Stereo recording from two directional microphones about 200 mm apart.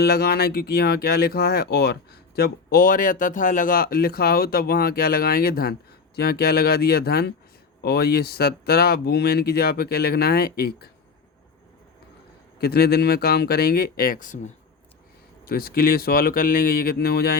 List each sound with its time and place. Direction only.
0.0 s speech: 50° left (ahead or behind)
12.5 s speech: 50° left (ahead or behind)